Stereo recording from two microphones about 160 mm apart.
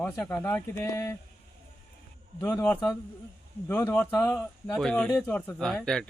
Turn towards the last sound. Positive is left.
turn(degrees=5)  # may be behind; listen again after turning